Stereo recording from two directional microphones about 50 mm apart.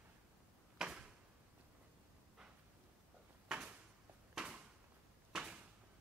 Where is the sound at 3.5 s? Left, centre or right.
Centre.